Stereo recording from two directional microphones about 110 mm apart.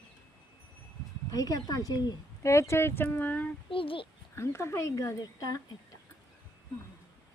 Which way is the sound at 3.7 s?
55° left (ahead or behind).